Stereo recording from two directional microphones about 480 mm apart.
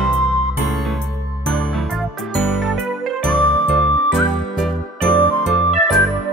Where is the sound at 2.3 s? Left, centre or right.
Centre.